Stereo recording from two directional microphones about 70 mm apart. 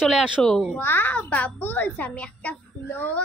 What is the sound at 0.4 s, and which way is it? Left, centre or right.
Speech, centre.